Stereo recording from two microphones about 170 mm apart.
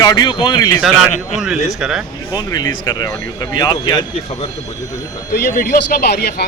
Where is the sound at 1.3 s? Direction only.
5° right (ahead or behind).